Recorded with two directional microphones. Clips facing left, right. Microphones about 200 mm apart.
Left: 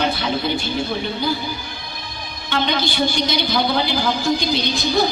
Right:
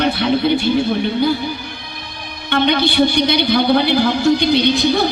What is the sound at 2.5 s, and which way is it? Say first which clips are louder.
A man's voice: right 6 dB; 60° right (ahead or behind).